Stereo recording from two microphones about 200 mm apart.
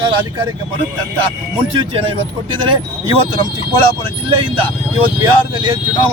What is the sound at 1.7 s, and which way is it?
Speech, 25° right (ahead or behind).